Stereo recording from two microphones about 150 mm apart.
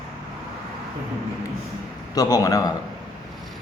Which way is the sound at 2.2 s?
25° left (ahead or behind).